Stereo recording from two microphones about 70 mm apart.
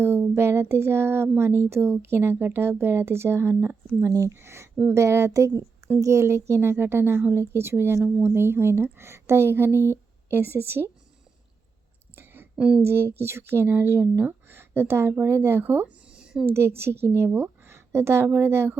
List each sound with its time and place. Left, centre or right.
0.0 s a sound: right
1.4 s speech: right
4.0 s speech: right
4.4 s speech: right
12.1 s a sound: right
12.5 s speech: centre
12.8 s speech: right; by 16.5 s centre
16.5 s speech: right